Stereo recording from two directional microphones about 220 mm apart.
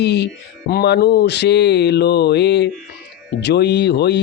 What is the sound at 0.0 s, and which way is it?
Speech, 50° left (ahead or behind).